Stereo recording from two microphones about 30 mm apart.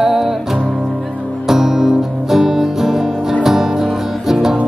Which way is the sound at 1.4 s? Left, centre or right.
Centre.